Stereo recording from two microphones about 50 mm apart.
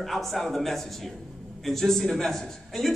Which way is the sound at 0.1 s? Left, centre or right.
Centre.